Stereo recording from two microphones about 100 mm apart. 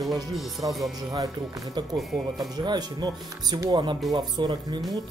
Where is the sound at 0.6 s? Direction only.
50° right (ahead or behind).